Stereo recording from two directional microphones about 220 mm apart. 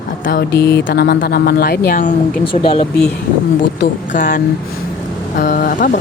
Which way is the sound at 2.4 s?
25° left (ahead or behind).